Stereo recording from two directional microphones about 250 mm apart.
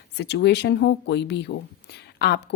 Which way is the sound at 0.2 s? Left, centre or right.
Left.